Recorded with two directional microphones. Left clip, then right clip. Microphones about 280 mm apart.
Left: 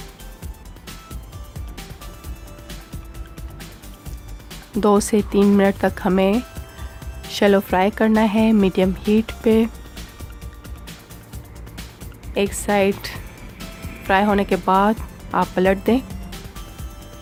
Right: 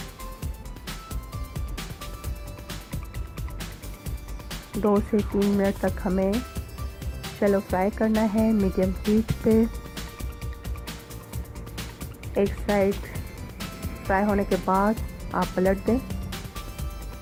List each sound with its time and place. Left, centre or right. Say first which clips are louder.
1.5 s music: left 1 dB; centre
4.8 s speech: left 7 dB; left
7.3 s speech: left 7 dB; left
9.4 s speech: left 4 dB; left
12.3 s speech: left 4 dB; left
14.1 s speech: left 6 dB; left
16.0 s music: even; centre